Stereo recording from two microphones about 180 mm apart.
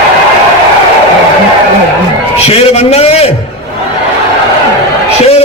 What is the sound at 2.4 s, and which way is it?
Speech, 35° left (ahead or behind).